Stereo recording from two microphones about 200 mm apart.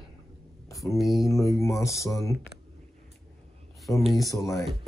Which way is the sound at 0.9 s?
Centre (ahead or behind).